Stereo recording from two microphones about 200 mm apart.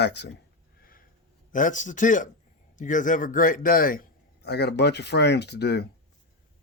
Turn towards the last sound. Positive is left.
turn(degrees=55)  # may be behind; listen again after turning